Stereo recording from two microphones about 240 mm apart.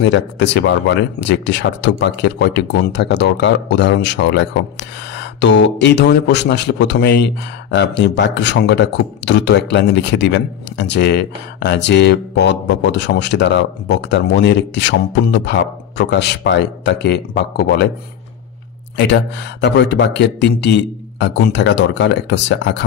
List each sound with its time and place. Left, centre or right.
0.0 s speech: left
18.9 s speech: left